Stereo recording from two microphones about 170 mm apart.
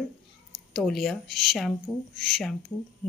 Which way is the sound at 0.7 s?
Centre (ahead or behind).